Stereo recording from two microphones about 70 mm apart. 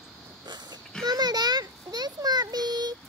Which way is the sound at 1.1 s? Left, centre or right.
Right.